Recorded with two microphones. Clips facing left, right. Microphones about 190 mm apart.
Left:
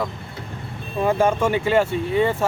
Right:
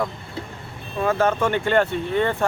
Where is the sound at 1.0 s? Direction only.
10° left (ahead or behind).